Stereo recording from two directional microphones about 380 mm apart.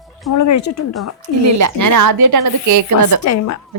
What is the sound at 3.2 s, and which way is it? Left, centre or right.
Speech, left.